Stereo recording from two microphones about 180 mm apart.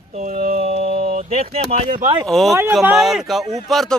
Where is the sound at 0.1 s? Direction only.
40° right (ahead or behind).